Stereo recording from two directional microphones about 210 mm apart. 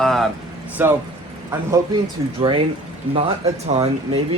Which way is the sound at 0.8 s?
10° right (ahead or behind).